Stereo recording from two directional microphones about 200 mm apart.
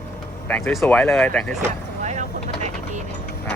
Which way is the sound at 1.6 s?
35° right (ahead or behind).